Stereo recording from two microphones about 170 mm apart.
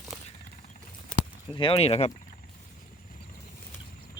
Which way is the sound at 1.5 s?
35° left (ahead or behind).